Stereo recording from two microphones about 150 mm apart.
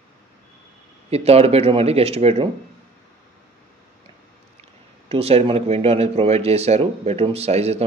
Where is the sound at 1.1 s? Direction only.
45° right (ahead or behind).